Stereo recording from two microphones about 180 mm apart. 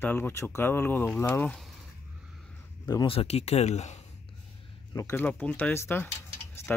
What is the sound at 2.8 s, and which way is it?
Speech, 20° left (ahead or behind).